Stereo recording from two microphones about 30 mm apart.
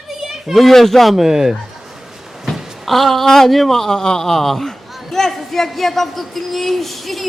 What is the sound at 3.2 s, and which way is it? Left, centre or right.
A man's voice, centre.